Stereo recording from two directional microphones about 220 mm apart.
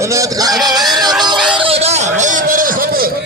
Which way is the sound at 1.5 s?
25° right (ahead or behind).